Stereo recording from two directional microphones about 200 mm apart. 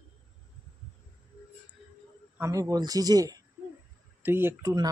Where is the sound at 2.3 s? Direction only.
15° right (ahead or behind).